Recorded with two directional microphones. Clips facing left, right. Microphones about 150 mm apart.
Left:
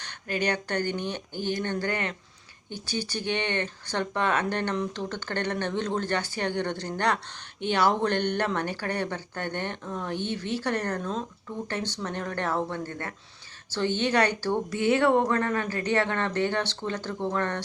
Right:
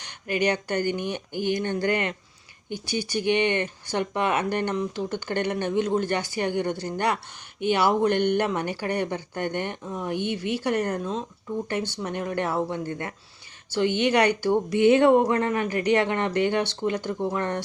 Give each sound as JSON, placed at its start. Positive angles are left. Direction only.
{"t": 0.0, "sound": "speech", "side_deg": -15}